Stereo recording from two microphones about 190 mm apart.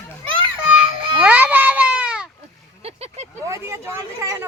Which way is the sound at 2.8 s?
35° right (ahead or behind).